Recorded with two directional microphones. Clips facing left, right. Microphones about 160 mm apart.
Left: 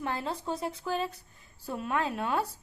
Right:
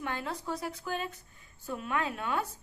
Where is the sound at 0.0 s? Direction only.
30° left (ahead or behind).